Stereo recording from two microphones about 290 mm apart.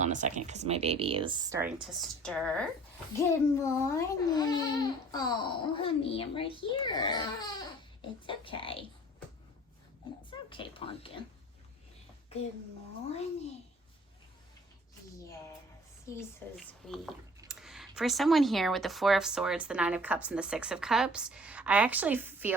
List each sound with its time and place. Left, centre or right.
0.0 s a child's voice: right; by 8.8 s centre
10.2 s speech: centre
16.1 s a child's voice: centre